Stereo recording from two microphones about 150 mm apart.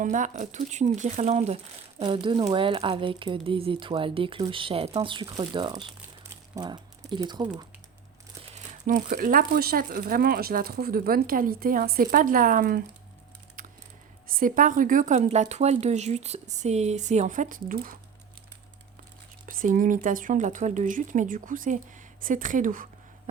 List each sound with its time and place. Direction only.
0.0 s speech: 60° right (ahead or behind)
2.0 s speech: 35° right (ahead or behind)
8.5 s speech: 55° right (ahead or behind)
13.6 s typing: 65° right (ahead or behind)
14.3 s speech: 70° right (ahead or behind)
19.5 s speech: 60° right (ahead or behind)